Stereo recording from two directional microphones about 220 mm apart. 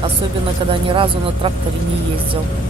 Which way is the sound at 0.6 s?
25° right (ahead or behind).